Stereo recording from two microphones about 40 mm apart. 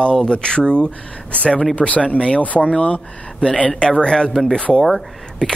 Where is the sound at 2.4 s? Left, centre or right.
Left.